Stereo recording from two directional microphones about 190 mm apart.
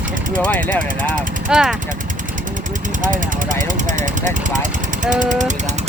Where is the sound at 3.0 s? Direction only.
45° right (ahead or behind).